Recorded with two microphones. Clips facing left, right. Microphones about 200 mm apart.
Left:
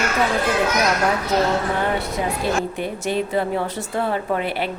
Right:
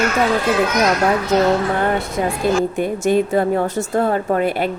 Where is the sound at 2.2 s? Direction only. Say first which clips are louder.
Right 7 dB; 55° right (ahead or behind).